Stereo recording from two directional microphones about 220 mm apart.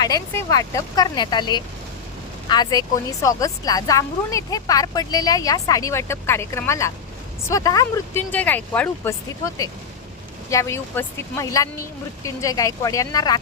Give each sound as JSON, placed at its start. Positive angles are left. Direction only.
{"t": 0.0, "sound": "a woman's voice", "side_deg": 15}